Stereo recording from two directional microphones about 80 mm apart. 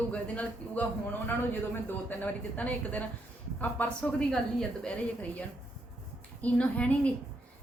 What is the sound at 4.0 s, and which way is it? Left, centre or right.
Speech, centre.